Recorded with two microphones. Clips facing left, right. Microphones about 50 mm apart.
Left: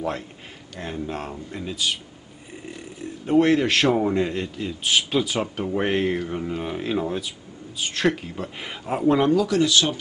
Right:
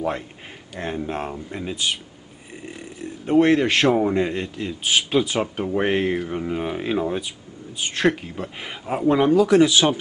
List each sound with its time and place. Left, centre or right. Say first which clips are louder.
0.7 s speech: right 3 dB; right
2.5 s speech: right 1 dB; centre
9.3 s speech: right 4 dB; right